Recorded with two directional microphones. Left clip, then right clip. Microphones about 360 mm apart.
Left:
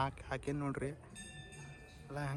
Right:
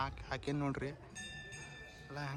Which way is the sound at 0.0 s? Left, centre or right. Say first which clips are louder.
Left 1 dB; centre.